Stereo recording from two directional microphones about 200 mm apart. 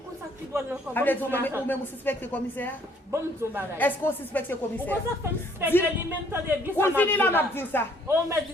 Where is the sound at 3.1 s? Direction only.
10° right (ahead or behind).